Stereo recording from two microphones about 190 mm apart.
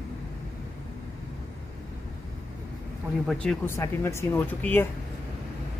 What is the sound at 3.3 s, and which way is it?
Speech, 5° left (ahead or behind).